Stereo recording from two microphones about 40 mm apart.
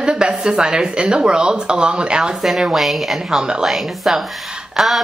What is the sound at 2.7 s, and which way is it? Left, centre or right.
Speech, centre.